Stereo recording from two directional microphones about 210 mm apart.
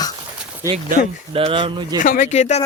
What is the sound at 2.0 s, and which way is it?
Speech, 40° left (ahead or behind).